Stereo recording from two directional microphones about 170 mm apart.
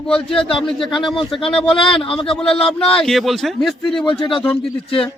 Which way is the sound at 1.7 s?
30° left (ahead or behind).